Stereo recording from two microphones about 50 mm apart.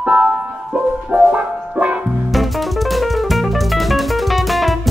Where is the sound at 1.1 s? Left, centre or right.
Right.